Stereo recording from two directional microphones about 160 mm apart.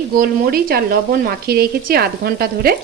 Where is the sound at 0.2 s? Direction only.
70° right (ahead or behind).